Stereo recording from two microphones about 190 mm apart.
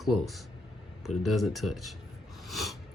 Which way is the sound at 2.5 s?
Centre (ahead or behind).